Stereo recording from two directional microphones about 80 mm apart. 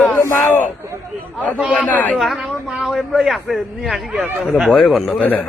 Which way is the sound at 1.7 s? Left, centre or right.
Centre.